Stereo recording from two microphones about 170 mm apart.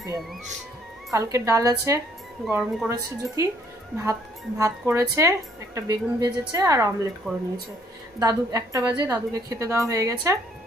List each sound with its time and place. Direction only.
1.1 s speech: 15° right (ahead or behind)
2.5 s speech: 5° right (ahead or behind)
3.9 s a woman's voice: 20° right (ahead or behind)
8.2 s a woman's voice: 20° right (ahead or behind)